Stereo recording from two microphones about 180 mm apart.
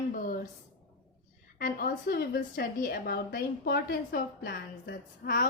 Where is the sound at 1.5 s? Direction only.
55° left (ahead or behind).